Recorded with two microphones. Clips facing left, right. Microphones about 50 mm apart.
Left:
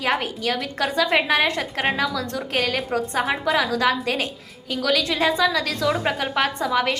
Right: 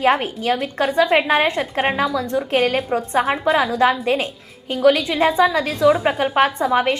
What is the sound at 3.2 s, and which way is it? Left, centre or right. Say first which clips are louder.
Speech: right 4 dB; centre.